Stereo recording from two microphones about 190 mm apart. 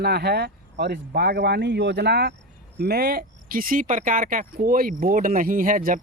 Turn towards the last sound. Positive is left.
turn(degrees=-45)  # may be behind; listen again after turning